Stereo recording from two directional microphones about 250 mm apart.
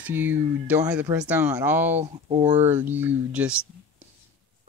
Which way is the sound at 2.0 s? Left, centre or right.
Right.